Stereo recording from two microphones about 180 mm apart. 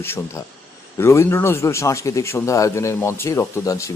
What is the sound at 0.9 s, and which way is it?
A man's voice, 15° left (ahead or behind).